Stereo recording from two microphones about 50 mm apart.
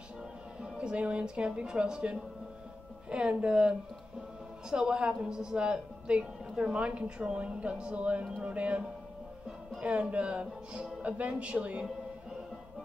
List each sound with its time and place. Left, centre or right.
0.6 s a woman's voice: right